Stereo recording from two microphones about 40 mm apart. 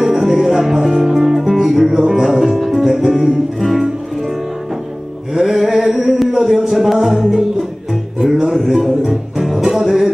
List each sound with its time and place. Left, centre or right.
0.0 s music: centre
5.3 s a sound: centre
6.7 s music: centre